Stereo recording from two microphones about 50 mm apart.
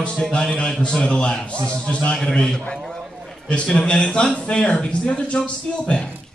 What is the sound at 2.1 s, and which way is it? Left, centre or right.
A man's voice, centre.